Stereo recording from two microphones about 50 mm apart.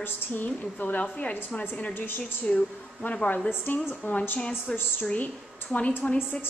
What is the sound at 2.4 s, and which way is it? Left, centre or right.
Speech, left.